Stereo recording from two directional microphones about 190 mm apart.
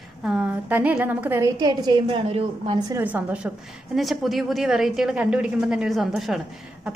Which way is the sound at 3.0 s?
10° right (ahead or behind).